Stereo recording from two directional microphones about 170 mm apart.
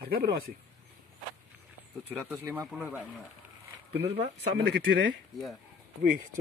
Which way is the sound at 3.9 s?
80° right.